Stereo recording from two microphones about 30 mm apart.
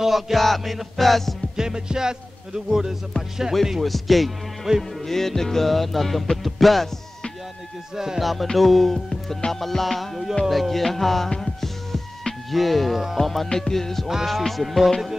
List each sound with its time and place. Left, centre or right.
0.0 s music: centre
1.6 s music: right
3.8 s music: centre
4.7 s music: centre
5.0 s music: centre
7.9 s music: centre
8.2 s music: centre
12.4 s music: centre